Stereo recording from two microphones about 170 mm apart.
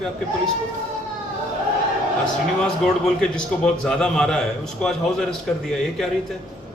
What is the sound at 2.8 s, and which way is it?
A man's voice, 5° left (ahead or behind).